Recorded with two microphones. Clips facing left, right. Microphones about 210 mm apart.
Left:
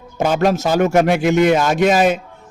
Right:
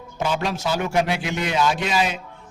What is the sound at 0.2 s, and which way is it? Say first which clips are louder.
A man's voice: left 8 dB; 45° left (ahead or behind).